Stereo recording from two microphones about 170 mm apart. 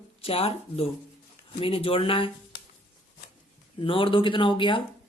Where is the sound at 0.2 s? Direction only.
35° left (ahead or behind).